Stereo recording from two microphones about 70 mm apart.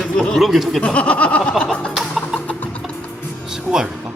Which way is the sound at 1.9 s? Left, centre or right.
Centre.